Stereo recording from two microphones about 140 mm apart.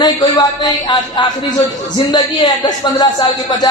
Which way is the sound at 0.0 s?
30° left (ahead or behind).